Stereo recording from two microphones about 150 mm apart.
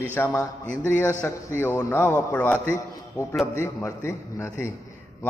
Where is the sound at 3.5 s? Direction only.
15° left (ahead or behind).